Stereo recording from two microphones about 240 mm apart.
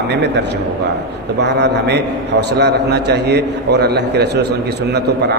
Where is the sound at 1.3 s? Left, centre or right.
Right.